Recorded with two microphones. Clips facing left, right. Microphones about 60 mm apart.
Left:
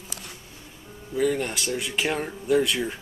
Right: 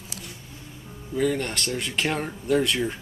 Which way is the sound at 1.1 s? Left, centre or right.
Centre.